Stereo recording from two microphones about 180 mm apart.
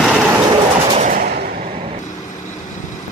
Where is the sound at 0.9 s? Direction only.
40° right (ahead or behind).